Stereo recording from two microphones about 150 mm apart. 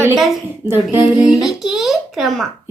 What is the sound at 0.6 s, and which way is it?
A child's voice, 15° right (ahead or behind).